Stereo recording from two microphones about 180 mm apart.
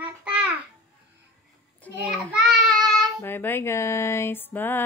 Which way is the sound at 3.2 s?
10° left (ahead or behind).